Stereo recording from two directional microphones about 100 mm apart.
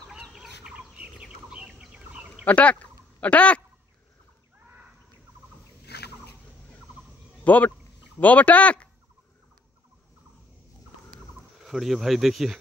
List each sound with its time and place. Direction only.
0.3 s bird: 5° right (ahead or behind)
2.4 s speech: 15° left (ahead or behind)
7.4 s speech: 15° left (ahead or behind)
11.6 s speech: centre (ahead or behind)